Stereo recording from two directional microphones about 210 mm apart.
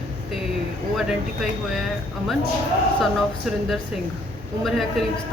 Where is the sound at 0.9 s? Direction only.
Centre (ahead or behind).